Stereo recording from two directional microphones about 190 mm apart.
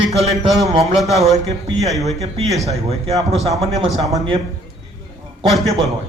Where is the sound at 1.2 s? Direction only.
35° right (ahead or behind).